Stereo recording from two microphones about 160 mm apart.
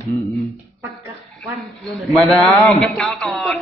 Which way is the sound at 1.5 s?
Centre (ahead or behind).